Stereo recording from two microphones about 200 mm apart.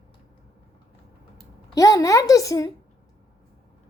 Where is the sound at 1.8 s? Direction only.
15° left (ahead or behind).